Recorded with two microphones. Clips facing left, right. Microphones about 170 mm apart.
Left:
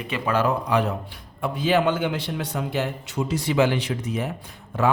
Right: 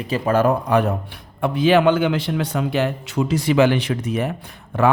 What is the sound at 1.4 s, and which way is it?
A man's voice, 70° right (ahead or behind).